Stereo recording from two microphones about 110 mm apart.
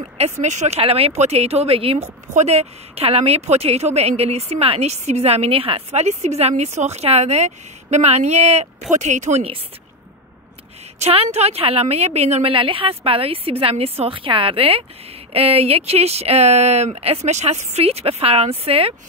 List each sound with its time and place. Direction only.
0.2 s speech: 90° right
8.9 s speech: 90° right
11.0 s a woman's voice: 70° right (ahead or behind)
16.9 s a woman's voice: 65° right (ahead or behind)